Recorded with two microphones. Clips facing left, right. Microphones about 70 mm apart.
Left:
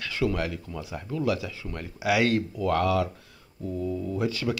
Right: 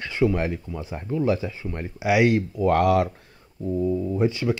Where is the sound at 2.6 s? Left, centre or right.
Right.